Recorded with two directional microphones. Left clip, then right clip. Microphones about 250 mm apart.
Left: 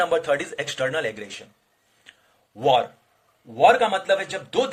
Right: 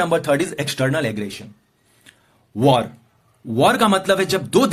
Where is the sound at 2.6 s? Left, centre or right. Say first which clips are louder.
Right 3 dB; centre.